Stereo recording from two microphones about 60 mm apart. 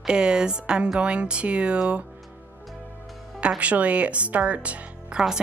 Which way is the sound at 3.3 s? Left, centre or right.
Centre.